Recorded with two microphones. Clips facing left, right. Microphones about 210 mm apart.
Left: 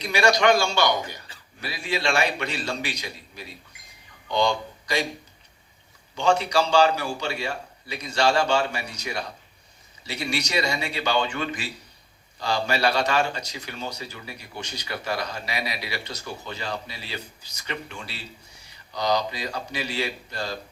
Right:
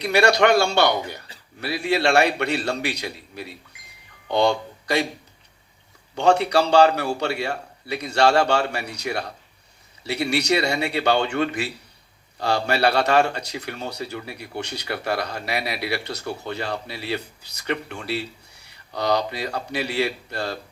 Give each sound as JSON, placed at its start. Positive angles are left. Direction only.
{"t": 0.0, "sound": "speech", "side_deg": -65}
{"t": 6.1, "sound": "speech", "side_deg": -65}